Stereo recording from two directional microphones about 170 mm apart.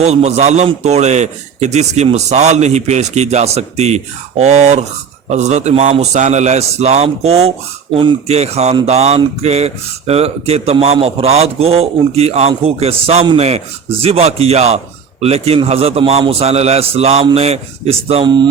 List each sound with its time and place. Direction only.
0.0 s speech: 40° right (ahead or behind)